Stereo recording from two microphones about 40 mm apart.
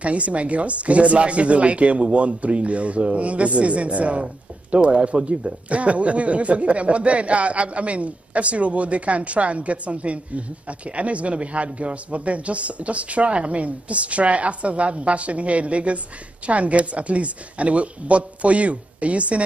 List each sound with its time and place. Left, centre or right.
0.0 s speech: right